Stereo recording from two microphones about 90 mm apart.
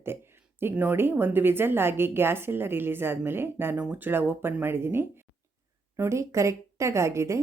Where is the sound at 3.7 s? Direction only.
15° right (ahead or behind).